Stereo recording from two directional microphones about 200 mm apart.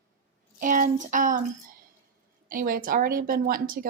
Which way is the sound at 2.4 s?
45° right (ahead or behind).